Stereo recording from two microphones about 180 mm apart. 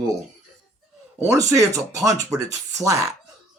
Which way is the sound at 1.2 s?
20° right (ahead or behind).